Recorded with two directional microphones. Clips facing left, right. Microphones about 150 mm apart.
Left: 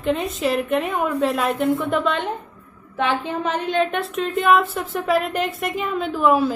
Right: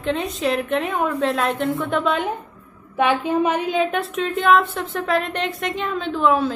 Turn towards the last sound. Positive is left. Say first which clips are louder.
# left 1 dB
turn(degrees=5)  # may be behind; listen again after turning